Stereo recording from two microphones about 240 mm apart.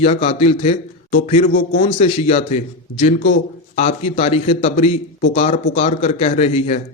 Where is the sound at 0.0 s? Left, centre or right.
Left.